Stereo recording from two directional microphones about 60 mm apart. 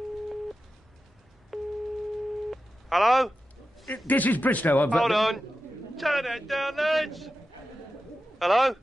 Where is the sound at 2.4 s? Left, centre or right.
Centre.